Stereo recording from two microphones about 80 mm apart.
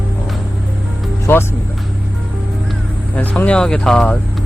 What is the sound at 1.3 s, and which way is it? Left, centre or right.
Speech, left.